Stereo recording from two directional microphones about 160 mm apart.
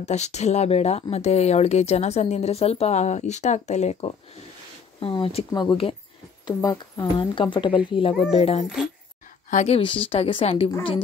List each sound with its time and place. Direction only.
0.0 s speech: 45° left (ahead or behind)
9.5 s speech: 50° left (ahead or behind)
9.8 s speech: 35° left (ahead or behind)